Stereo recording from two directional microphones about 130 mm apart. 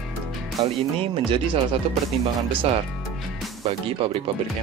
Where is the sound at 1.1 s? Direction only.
40° right (ahead or behind).